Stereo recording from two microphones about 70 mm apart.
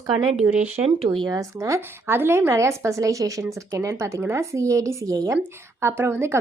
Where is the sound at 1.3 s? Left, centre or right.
Right.